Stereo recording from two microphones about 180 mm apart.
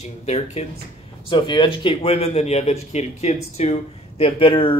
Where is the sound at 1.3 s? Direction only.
25° left (ahead or behind).